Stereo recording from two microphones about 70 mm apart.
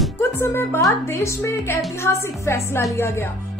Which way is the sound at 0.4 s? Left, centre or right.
Left.